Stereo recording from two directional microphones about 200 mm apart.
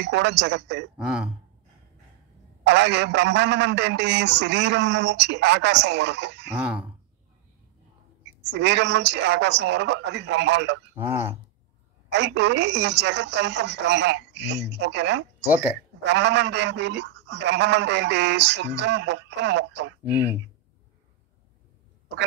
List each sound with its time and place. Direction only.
0.0 s a man's voice: 60° right (ahead or behind)
0.9 s speech: 5° right (ahead or behind)
2.6 s a man's voice: 60° right (ahead or behind)
6.5 s speech: 5° right (ahead or behind)
8.5 s a man's voice: 60° right (ahead or behind)
11.0 s speech: 10° right (ahead or behind)
12.1 s a man's voice: 60° right (ahead or behind)
15.4 s speech: 10° right (ahead or behind)
16.0 s a man's voice: 60° right (ahead or behind)
20.0 s speech: 10° right (ahead or behind)